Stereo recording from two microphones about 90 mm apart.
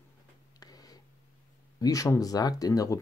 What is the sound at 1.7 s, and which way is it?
Speech, 40° left (ahead or behind).